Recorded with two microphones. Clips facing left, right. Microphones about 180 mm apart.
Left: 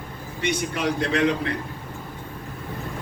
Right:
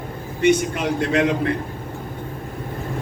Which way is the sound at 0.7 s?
55° right (ahead or behind).